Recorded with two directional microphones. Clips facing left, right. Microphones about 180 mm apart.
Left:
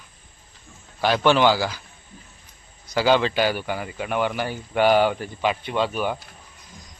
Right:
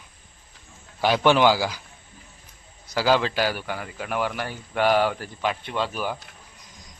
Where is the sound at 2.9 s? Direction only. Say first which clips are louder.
Left 2 dB; centre (ahead or behind).